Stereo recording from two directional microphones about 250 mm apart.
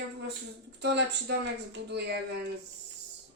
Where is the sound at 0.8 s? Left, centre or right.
Right.